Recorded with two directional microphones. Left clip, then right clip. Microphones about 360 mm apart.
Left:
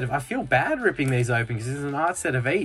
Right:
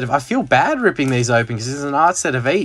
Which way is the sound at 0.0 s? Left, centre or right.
Centre.